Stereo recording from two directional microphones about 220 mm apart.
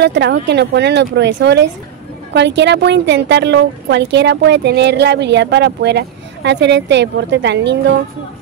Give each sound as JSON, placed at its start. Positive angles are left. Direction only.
{"t": 0.0, "sound": "a woman's voice", "side_deg": -55}